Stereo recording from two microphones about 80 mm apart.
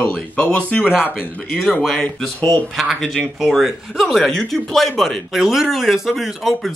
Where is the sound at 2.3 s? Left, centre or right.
Left.